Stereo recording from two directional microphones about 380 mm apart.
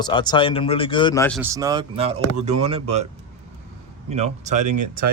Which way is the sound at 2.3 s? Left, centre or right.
Right.